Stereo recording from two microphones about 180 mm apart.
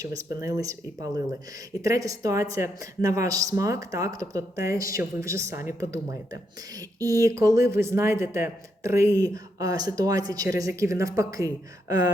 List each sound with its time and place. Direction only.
0.0 s speech: 20° right (ahead or behind)